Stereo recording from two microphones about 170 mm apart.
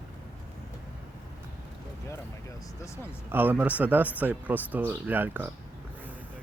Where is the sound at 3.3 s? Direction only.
10° right (ahead or behind).